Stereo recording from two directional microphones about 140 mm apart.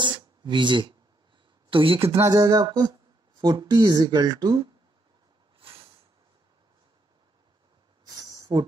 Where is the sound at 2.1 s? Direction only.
25° right (ahead or behind).